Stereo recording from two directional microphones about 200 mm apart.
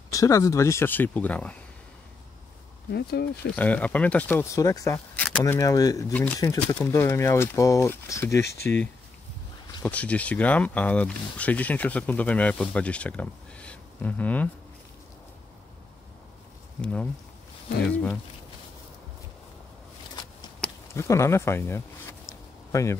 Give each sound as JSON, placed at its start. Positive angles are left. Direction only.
{"t": 0.1, "sound": "speech", "side_deg": 15}
{"t": 2.9, "sound": "speech", "side_deg": 55}
{"t": 3.5, "sound": "speech", "side_deg": 5}
{"t": 5.4, "sound": "speech", "side_deg": 15}
{"t": 9.8, "sound": "speech", "side_deg": 5}
{"t": 16.8, "sound": "speech", "side_deg": 5}
{"t": 20.9, "sound": "a sound", "side_deg": 15}